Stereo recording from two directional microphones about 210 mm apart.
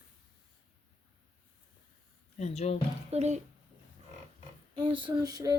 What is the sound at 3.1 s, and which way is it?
Speech, 30° right (ahead or behind).